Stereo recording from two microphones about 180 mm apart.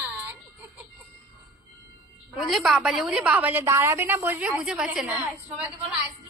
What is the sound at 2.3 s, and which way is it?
A woman's voice, centre (ahead or behind).